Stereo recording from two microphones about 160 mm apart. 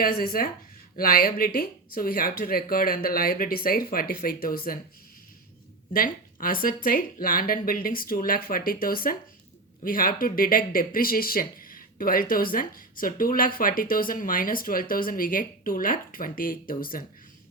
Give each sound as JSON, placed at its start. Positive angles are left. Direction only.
{"t": 0.0, "sound": "speech", "side_deg": 70}
{"t": 5.9, "sound": "a woman's voice", "side_deg": 65}